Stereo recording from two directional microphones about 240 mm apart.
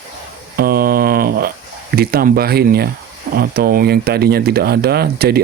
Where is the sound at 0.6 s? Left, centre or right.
Right.